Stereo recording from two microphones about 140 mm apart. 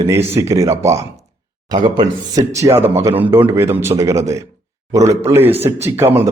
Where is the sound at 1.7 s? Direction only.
35° right (ahead or behind).